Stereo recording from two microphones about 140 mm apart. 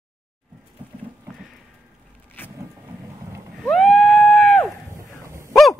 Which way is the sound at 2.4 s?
15° left (ahead or behind).